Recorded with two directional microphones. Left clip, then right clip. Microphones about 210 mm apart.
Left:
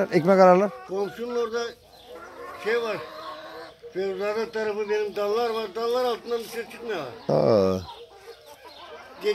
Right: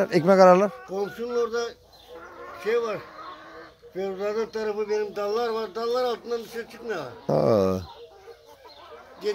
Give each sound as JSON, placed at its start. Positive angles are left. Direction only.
{"t": 0.0, "sound": "speech", "side_deg": -15}
{"t": 0.9, "sound": "a man's voice", "side_deg": -55}
{"t": 3.2, "sound": "chicken", "side_deg": 55}
{"t": 3.9, "sound": "speech", "side_deg": -50}
{"t": 7.2, "sound": "speech", "side_deg": -5}